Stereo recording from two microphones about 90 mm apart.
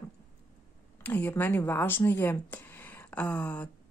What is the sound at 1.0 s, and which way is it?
Speech, 20° left (ahead or behind).